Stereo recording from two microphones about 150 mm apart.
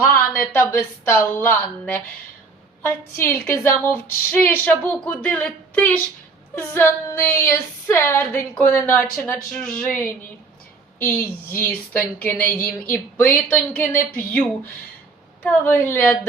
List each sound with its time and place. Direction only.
0.0 s female singing: 10° left (ahead or behind)
11.5 s female singing: 10° left (ahead or behind)